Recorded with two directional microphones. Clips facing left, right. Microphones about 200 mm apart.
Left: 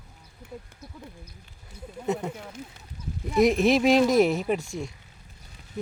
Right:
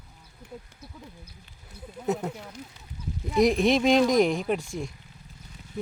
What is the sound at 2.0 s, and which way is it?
Speech, 5° right (ahead or behind).